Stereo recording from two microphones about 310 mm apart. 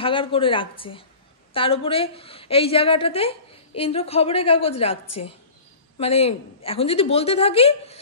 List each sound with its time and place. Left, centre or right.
0.0 s a woman's voice: centre
5.9 s a woman's voice: centre